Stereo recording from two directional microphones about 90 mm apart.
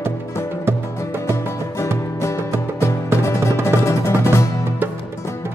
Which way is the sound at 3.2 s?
30° left (ahead or behind).